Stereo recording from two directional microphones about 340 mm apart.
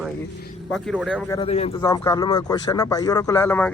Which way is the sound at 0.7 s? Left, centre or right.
Centre.